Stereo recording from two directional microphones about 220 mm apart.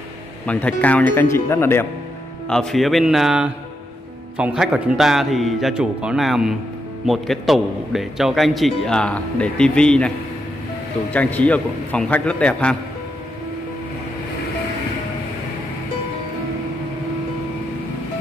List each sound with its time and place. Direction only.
0.5 s a man's voice: 5° left (ahead or behind)